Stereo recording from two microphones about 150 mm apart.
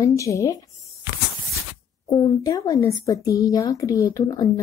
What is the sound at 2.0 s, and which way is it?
A woman's voice, 25° left (ahead or behind).